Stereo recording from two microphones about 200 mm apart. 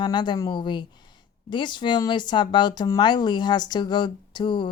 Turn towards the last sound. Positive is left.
turn(degrees=25)  # may be behind; listen again after turning